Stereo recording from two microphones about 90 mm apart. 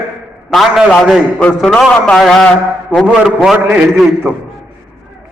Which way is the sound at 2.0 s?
5° left (ahead or behind).